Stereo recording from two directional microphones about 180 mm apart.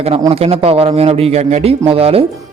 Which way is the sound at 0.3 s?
35° right (ahead or behind).